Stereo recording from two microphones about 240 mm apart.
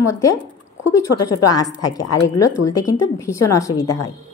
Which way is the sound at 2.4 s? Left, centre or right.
Left.